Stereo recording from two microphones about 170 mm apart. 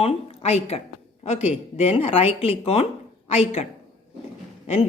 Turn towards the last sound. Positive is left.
turn(degrees=40)  # may be behind; listen again after turning